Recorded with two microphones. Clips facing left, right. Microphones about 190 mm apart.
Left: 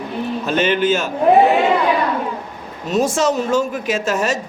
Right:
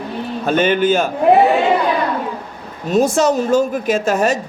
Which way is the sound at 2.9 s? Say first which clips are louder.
Right 3 dB; 55° right (ahead or behind).